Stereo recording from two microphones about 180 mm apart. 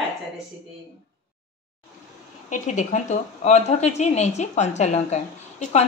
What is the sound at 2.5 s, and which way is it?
A woman's voice, 45° left (ahead or behind).